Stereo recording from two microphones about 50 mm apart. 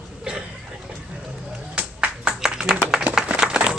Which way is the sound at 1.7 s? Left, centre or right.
Right.